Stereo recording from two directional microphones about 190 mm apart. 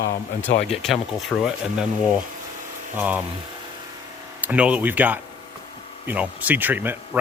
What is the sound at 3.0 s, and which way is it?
Speech, 10° right (ahead or behind).